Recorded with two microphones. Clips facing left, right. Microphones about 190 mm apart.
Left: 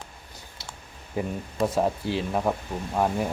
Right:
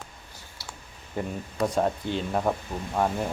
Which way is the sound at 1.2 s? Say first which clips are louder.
Left 2 dB; 5° left (ahead or behind).